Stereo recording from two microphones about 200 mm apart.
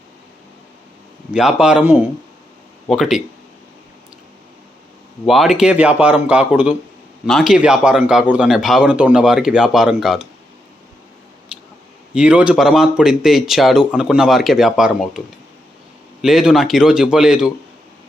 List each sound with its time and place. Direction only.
1.3 s speech: 5° right (ahead or behind)
5.2 s speech: centre (ahead or behind)
12.1 s speech: 5° right (ahead or behind)
16.2 s speech: 5° right (ahead or behind)